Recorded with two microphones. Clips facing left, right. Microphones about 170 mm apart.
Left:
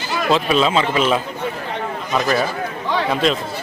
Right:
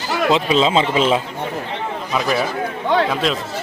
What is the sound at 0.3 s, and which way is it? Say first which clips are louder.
Speech: even; 20° right (ahead or behind).